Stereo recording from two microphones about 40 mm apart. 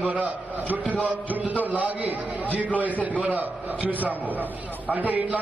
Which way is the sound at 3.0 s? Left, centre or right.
Right.